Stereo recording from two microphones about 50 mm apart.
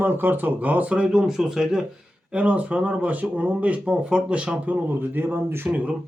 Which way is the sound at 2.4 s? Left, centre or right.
Right.